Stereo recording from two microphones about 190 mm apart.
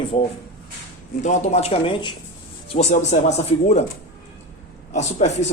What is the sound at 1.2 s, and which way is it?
Speech, 40° left (ahead or behind).